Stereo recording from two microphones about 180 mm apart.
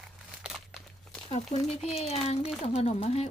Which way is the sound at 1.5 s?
40° left (ahead or behind).